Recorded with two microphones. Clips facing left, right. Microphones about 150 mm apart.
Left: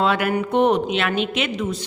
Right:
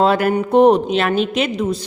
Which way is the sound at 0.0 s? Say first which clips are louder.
Right 5 dB; 40° right (ahead or behind).